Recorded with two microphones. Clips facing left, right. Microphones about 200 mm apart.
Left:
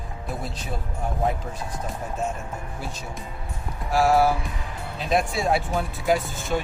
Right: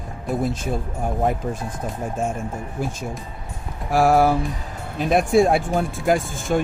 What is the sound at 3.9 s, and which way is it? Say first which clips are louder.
Speech: right 3 dB; 50° right (ahead or behind).